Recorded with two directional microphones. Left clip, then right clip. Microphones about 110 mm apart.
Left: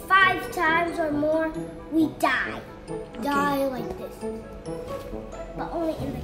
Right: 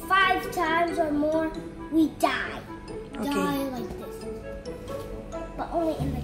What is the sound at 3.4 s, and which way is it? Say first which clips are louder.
Speech: left 4 dB; 35° left (ahead or behind).